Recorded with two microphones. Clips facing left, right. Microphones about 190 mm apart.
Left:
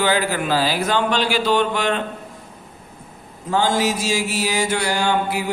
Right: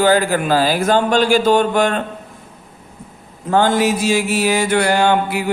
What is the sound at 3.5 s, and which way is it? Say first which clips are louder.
Mantra: right 4 dB; 55° right (ahead or behind).